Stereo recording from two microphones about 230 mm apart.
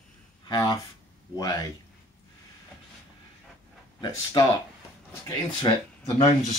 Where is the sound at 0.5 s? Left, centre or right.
Centre.